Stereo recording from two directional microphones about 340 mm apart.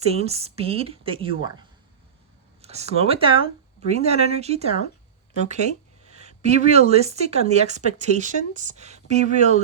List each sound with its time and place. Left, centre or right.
0.0 s a woman's voice: centre